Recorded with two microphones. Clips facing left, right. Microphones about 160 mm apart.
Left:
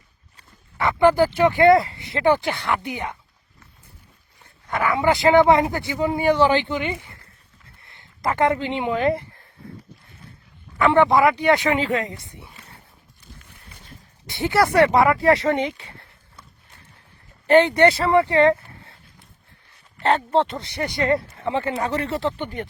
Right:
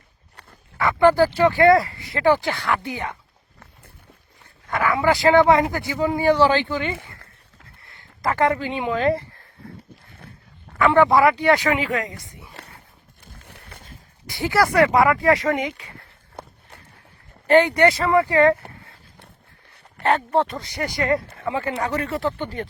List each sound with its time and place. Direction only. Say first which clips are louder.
0.8 s speech: right 1 dB; 20° left (ahead or behind)
4.7 s speech: even; 20° left (ahead or behind)
10.8 s speech: even; 20° left (ahead or behind)
13.2 s a sound: right 2 dB; 55° right (ahead or behind)
14.3 s speech: left 1 dB; 25° left (ahead or behind)
16.4 s walk: right 11 dB; 60° right (ahead or behind)
17.4 s speech: left 1 dB; 20° left (ahead or behind)
20.0 s speech: even; 25° left (ahead or behind)